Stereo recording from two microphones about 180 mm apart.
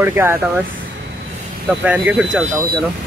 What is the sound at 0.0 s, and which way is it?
Speech, 15° right (ahead or behind).